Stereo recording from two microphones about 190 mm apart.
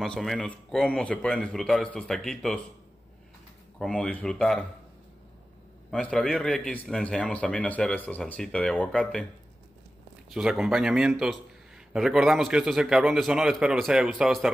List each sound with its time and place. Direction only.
0.0 s a man's voice: centre (ahead or behind)
3.8 s a man's voice: 5° left (ahead or behind)
5.9 s a man's voice: 5° left (ahead or behind)
10.3 s a man's voice: 5° right (ahead or behind)